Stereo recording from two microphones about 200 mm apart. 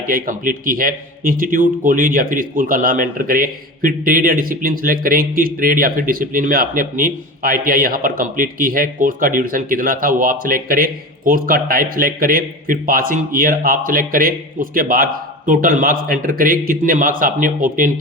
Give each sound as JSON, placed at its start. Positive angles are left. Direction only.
{"t": 0.1, "sound": "speech", "side_deg": -45}